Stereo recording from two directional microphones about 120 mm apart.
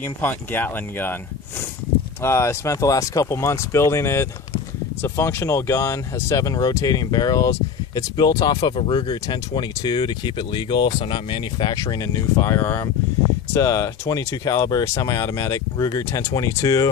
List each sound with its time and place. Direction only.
0.0 s speech: 15° left (ahead or behind)
2.2 s speech: 25° left (ahead or behind); by 11.7 s 45° left (ahead or behind)
11.7 s speech: 25° left (ahead or behind)